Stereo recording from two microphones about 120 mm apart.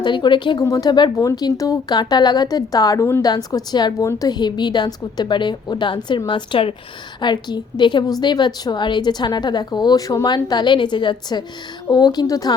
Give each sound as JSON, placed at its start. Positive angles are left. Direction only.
{"t": 0.0, "sound": "speech", "side_deg": 40}
{"t": 0.6, "sound": "speech", "side_deg": 30}